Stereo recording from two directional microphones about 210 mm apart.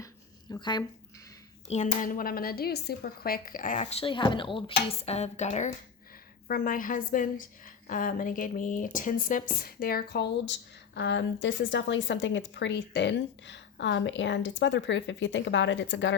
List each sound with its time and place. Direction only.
0.5 s speech: 20° left (ahead or behind)
1.6 s speech: 35° left (ahead or behind); by 16.1 s 60° left (ahead or behind)